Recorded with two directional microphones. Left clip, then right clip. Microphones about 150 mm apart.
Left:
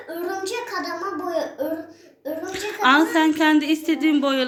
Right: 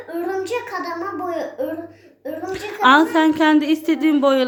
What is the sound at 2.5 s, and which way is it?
A woman's voice, 25° right (ahead or behind).